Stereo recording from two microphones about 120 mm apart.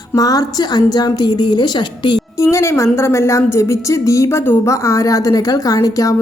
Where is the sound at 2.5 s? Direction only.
25° left (ahead or behind).